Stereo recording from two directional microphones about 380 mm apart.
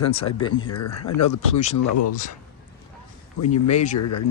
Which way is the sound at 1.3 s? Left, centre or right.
Centre.